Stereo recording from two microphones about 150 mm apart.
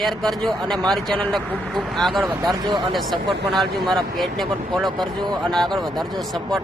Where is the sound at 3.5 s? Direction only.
Centre (ahead or behind).